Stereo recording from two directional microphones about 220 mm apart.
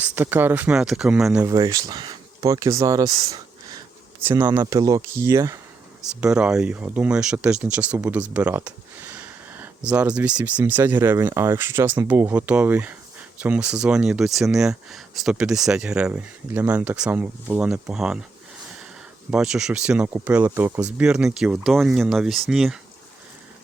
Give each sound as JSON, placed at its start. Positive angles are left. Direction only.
{"t": 0.0, "sound": "speech", "side_deg": -10}
{"t": 1.5, "sound": "speech", "side_deg": -15}
{"t": 19.3, "sound": "speech", "side_deg": -5}